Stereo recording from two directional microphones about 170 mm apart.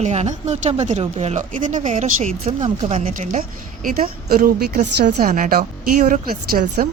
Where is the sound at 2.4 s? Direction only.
30° right (ahead or behind).